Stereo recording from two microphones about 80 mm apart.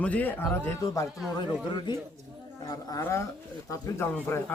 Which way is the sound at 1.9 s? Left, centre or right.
Left.